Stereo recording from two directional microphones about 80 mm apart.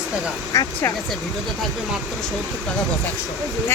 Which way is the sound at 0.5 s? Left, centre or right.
Left.